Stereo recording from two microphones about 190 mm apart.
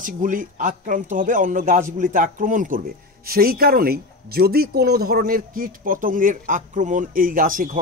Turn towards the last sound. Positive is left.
turn(degrees=-45)  # may be behind; listen again after turning